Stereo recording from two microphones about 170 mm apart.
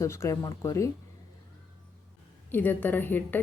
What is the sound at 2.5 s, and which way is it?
Speech, 10° left (ahead or behind).